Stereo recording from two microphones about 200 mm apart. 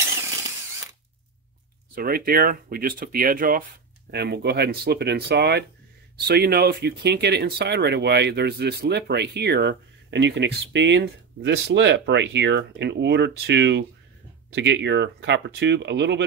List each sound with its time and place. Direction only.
2.0 s speech: 50° right (ahead or behind)
4.1 s speech: 55° right (ahead or behind)